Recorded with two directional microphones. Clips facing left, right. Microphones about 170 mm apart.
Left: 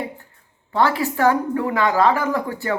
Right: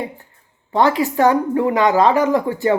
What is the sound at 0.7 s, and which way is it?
Speech, 20° right (ahead or behind).